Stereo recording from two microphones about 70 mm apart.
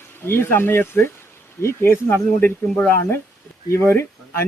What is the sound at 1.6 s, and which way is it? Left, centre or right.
Speech, left.